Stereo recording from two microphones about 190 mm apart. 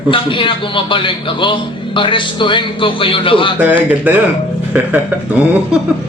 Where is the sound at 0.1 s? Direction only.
25° left (ahead or behind).